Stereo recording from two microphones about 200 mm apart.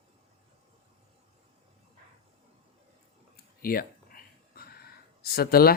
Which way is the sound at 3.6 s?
45° left (ahead or behind).